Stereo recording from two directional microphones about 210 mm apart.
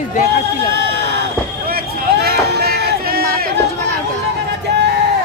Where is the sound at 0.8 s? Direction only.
55° right (ahead or behind).